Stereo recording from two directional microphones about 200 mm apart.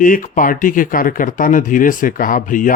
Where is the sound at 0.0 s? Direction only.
40° left (ahead or behind).